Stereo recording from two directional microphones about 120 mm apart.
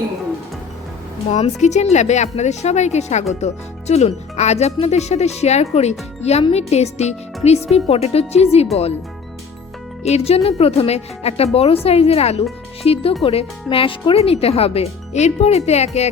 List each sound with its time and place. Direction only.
1.3 s speech: 70° left (ahead or behind)
10.0 s speech: 65° left (ahead or behind)